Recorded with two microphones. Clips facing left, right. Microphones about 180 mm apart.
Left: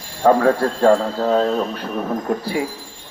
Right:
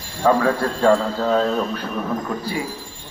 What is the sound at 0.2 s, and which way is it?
A man's voice, 40° left (ahead or behind).